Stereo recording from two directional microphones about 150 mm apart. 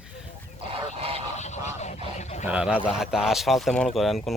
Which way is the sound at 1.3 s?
50° left (ahead or behind).